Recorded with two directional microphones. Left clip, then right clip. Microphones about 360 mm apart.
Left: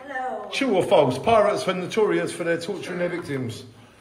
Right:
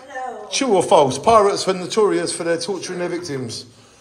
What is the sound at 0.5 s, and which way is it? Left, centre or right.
Speech, centre.